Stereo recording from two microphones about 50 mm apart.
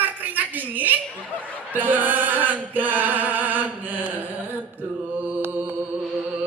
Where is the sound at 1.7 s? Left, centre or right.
Right.